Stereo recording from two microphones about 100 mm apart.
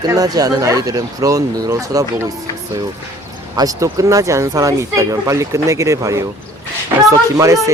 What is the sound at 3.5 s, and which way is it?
Speech, 35° right (ahead or behind).